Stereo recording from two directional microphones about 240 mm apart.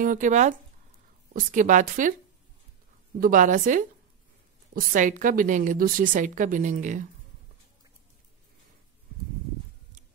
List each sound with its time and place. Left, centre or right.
0.0 s a woman's voice: right
3.2 s a woman's voice: right